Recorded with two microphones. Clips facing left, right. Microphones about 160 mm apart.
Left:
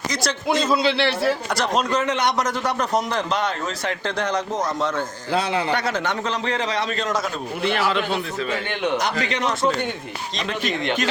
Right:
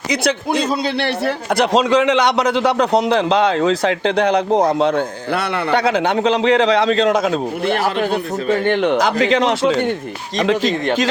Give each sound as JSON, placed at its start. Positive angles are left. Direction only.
{"t": 0.1, "sound": "a man's voice", "side_deg": -65}
{"t": 0.7, "sound": "a man's voice", "side_deg": -50}
{"t": 9.4, "sound": "speech", "side_deg": -90}